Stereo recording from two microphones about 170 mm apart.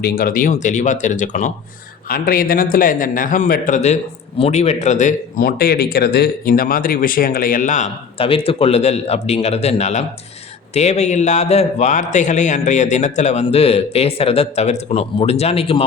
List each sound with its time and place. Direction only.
0.0 s a man's voice: 60° left (ahead or behind)
2.0 s a man's voice: 60° left (ahead or behind)
8.2 s a man's voice: 35° left (ahead or behind)